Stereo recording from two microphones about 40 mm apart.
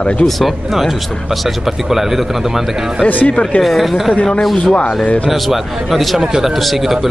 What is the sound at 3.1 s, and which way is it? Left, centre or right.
Speech, left.